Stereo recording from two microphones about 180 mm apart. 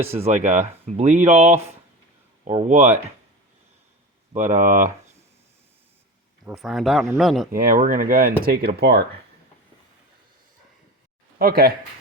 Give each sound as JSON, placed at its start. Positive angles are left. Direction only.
{"t": 0.2, "sound": "speech", "side_deg": -40}
{"t": 2.6, "sound": "speech", "side_deg": -40}
{"t": 4.3, "sound": "speech", "side_deg": -40}
{"t": 6.4, "sound": "speech", "side_deg": 0}
{"t": 7.5, "sound": "speech", "side_deg": -50}
{"t": 8.4, "sound": "speech", "side_deg": -60}
{"t": 11.3, "sound": "speech", "side_deg": -55}